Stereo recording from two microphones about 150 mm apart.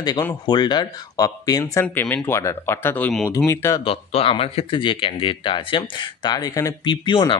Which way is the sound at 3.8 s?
40° left (ahead or behind).